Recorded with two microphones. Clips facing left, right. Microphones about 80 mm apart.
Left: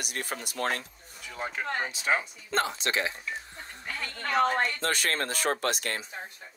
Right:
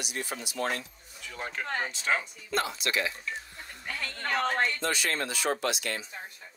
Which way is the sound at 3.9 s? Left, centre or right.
Left.